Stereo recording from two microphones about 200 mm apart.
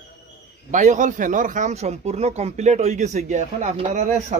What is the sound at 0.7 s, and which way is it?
Speech, 40° right (ahead or behind).